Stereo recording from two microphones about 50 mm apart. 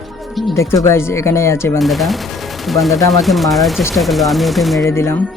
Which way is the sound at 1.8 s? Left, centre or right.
Centre.